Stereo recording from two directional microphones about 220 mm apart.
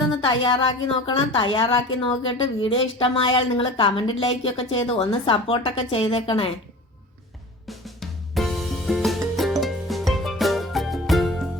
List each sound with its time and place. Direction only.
0.1 s a woman's voice: 20° left (ahead or behind)
8.4 s music: centre (ahead or behind)